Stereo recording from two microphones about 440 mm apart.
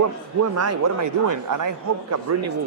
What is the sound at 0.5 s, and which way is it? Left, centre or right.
A man's voice, right.